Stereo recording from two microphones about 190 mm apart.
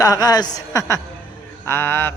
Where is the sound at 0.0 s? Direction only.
20° left (ahead or behind).